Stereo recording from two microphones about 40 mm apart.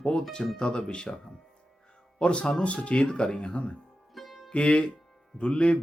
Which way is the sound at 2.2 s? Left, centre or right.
Left.